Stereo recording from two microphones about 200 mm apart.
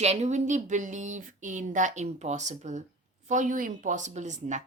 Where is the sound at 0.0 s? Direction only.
35° right (ahead or behind).